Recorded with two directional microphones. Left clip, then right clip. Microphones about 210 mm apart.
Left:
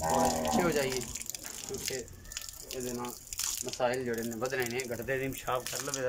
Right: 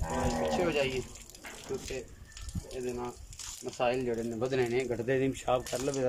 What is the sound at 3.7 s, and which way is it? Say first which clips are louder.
Speech: right 2 dB; 10° right (ahead or behind).